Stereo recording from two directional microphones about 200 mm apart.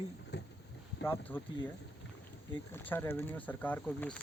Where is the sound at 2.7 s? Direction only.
10° left (ahead or behind).